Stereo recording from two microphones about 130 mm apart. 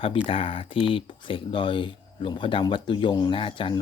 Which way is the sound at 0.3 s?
45° left (ahead or behind).